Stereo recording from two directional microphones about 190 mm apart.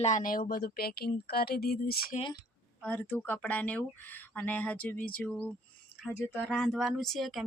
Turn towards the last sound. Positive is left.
turn(degrees=0)  # may be behind; listen again after turning